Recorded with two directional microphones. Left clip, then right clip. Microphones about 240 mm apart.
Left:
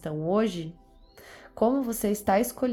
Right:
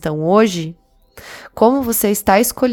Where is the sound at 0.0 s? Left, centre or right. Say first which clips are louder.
Right 13 dB; right.